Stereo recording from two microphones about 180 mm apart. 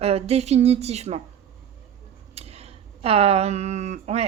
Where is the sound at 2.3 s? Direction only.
35° right (ahead or behind).